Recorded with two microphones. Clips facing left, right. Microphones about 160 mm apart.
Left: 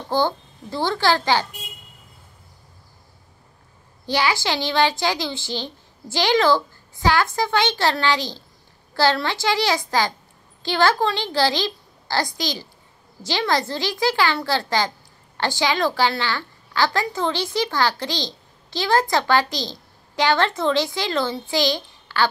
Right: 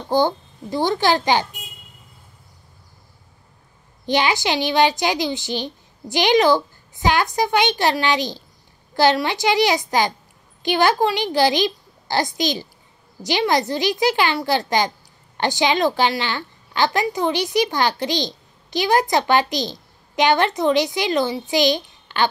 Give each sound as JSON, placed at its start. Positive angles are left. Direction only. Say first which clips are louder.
{"t": 0.1, "sound": "a woman's voice", "louder": "right 3 dB", "side_deg": -15}
{"t": 4.0, "sound": "a woman's voice", "louder": "right 2 dB", "side_deg": -20}